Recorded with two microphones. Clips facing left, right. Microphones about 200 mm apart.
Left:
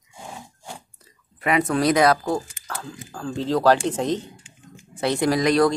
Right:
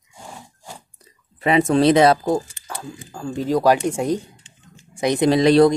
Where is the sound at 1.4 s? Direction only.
25° right (ahead or behind).